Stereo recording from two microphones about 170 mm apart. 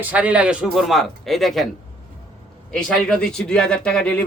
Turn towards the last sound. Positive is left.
turn(degrees=5)  # may be behind; listen again after turning